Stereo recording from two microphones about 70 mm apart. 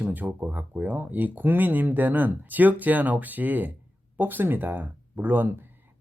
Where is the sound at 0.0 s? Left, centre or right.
Right.